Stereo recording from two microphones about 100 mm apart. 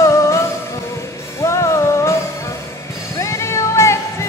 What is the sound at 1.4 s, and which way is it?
Music, 30° left (ahead or behind).